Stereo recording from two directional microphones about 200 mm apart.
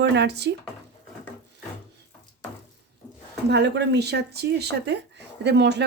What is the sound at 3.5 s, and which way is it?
Speech, 60° right (ahead or behind).